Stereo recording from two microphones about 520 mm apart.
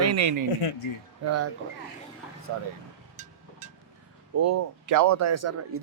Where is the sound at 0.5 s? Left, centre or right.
Left.